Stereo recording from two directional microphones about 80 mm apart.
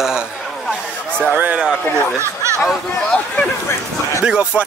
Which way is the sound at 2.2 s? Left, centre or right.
Right.